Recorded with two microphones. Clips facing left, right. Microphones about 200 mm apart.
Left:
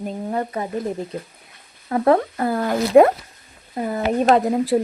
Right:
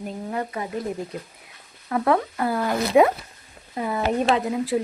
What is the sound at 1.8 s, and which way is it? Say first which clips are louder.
Speech: left 4 dB; 35° left (ahead or behind).